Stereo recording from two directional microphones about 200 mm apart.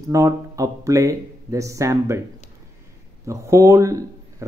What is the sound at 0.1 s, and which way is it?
A man's voice, 15° right (ahead or behind).